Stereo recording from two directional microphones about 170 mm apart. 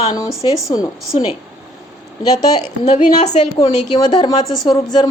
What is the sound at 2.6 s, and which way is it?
Speech, 45° left (ahead or behind).